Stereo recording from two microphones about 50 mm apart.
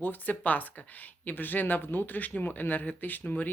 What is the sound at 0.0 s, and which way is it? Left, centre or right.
Speech, left.